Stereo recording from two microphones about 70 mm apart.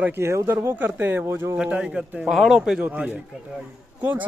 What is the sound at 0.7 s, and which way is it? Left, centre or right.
Speech, right.